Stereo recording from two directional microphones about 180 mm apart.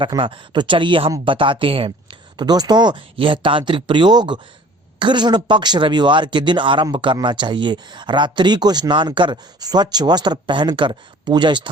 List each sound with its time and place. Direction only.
0.0 s speech: 30° right (ahead or behind)